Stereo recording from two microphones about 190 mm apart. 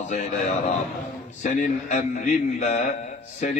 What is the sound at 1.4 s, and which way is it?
A man's voice, 40° left (ahead or behind).